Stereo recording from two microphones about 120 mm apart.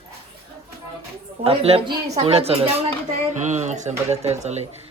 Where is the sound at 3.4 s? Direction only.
75° right (ahead or behind).